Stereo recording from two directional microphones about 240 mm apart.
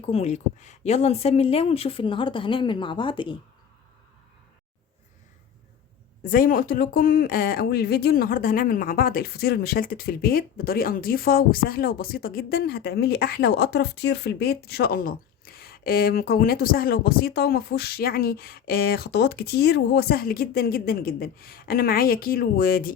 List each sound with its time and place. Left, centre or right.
0.0 s a woman's voice: left
6.2 s speech: left